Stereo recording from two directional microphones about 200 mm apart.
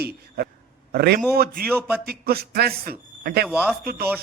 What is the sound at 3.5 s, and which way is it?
Speech, 5° right (ahead or behind).